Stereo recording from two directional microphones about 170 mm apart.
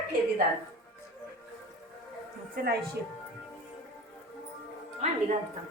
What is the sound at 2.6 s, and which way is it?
Speech, 65° right (ahead or behind).